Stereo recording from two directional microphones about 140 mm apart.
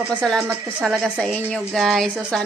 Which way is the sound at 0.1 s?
5° left (ahead or behind).